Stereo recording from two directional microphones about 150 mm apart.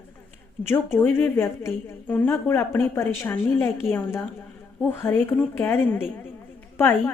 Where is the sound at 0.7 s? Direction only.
15° left (ahead or behind).